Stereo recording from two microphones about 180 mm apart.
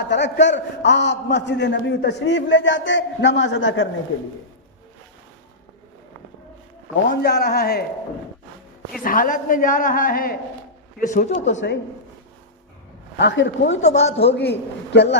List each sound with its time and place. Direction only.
0.1 s a man's voice: 75° left (ahead or behind)
7.1 s speech: 65° left (ahead or behind)
9.0 s a woman's voice: 50° left (ahead or behind)
13.1 s speech: 85° left
13.8 s speech: 35° left (ahead or behind)
14.9 s a man's voice: 70° left (ahead or behind)